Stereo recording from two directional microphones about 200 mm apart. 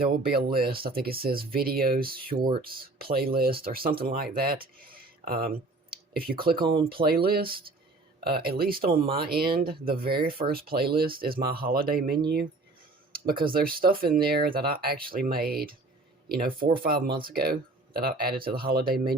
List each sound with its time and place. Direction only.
0.0 s speech: 50° right (ahead or behind)
13.4 s speech: 45° right (ahead or behind)